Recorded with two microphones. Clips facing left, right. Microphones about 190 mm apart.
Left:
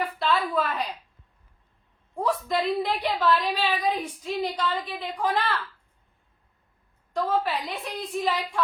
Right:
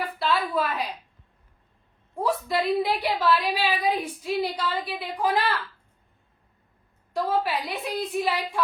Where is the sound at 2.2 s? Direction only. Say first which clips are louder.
Right 1 dB; 5° right (ahead or behind).